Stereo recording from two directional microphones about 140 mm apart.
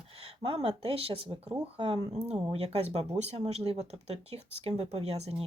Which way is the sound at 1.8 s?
35° right (ahead or behind).